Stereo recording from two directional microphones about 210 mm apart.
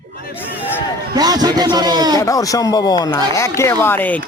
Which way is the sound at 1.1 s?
20° right (ahead or behind).